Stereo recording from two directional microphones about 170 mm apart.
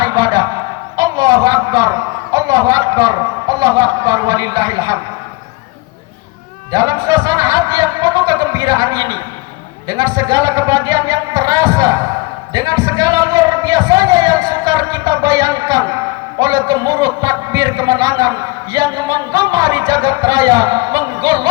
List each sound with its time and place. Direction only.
0.0 s a sound: 25° right (ahead or behind)
2.3 s a man's voice: 20° right (ahead or behind)
6.7 s a man's voice: 25° right (ahead or behind)